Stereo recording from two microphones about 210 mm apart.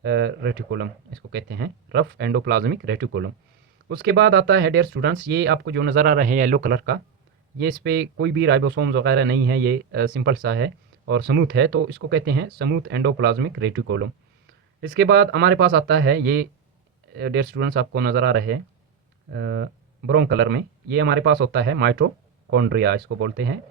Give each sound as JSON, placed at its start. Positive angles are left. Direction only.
{"t": 0.0, "sound": "speech", "side_deg": -55}
{"t": 14.8, "sound": "speech", "side_deg": -50}